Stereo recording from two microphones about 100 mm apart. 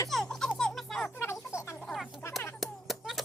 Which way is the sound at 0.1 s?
5° left (ahead or behind).